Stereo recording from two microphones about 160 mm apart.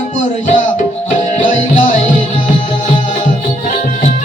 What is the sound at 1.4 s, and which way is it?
Tabla, 55° left (ahead or behind).